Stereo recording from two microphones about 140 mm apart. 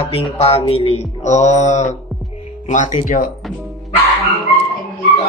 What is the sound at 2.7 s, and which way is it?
Speech, 65° left (ahead or behind).